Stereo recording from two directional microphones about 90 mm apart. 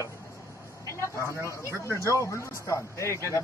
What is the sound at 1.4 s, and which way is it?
Speech, 35° left (ahead or behind).